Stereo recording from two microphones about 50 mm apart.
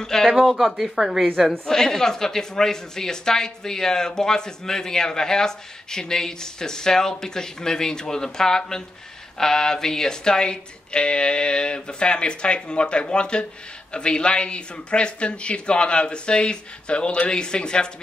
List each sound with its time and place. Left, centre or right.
0.0 s speech: centre
0.4 s speech: centre
1.4 s speech: centre